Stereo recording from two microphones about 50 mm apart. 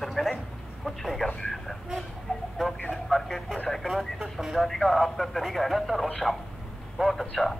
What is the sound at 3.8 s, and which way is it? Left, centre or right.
Speech, centre.